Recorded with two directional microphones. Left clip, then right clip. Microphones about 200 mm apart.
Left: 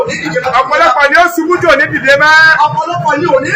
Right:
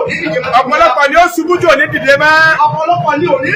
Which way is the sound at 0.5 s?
Centre (ahead or behind).